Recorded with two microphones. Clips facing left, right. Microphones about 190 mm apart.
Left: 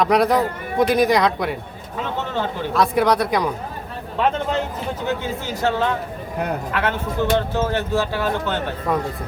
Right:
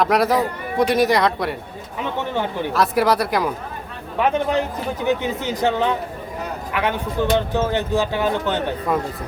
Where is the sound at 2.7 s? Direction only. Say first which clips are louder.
Left 1 dB; centre (ahead or behind).